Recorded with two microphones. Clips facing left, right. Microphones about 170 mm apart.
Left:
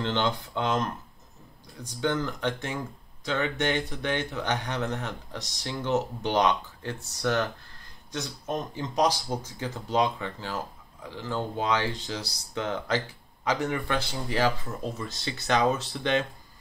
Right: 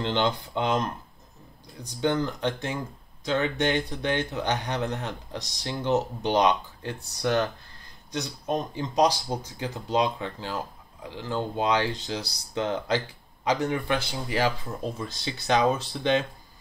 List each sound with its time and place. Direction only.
0.0 s speech: 15° right (ahead or behind)